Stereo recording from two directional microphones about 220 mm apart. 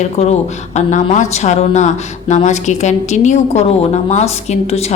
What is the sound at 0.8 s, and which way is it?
A woman's voice, 35° left (ahead or behind).